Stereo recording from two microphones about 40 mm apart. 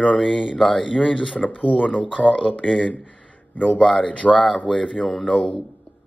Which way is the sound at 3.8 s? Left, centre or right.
Left.